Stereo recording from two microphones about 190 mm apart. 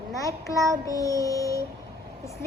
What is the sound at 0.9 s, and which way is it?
Child singing, 15° left (ahead or behind).